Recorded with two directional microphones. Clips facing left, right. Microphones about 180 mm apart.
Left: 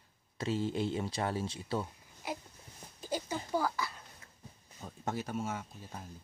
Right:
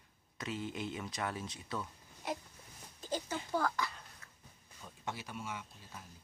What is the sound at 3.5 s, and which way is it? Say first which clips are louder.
Speech: left 1 dB; 5° left (ahead or behind).